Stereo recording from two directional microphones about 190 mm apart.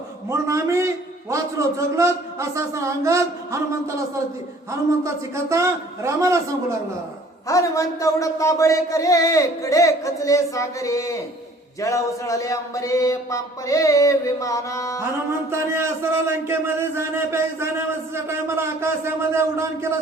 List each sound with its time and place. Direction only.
0.3 s a man's voice: 15° right (ahead or behind)
7.4 s a man's voice: 15° left (ahead or behind)
15.4 s a man's voice: 15° right (ahead or behind)